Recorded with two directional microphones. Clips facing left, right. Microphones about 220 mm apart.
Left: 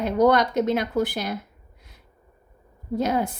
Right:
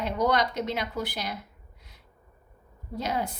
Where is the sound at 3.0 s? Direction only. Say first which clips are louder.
Left 6 dB; 50° left (ahead or behind).